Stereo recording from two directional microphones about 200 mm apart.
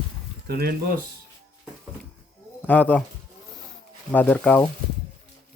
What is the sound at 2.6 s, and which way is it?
Speech, 10° left (ahead or behind).